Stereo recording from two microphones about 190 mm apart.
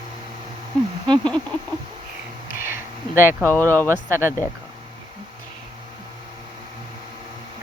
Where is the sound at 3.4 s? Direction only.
10° left (ahead or behind).